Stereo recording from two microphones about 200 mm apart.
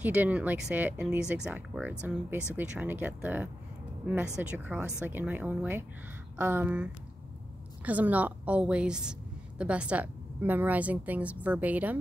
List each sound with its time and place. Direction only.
0.0 s a woman's voice: 10° right (ahead or behind)